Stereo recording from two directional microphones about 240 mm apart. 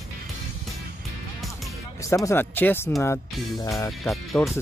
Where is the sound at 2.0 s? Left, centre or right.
Centre.